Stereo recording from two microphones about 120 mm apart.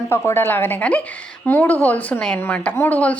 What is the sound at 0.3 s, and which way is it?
Speech, 15° left (ahead or behind).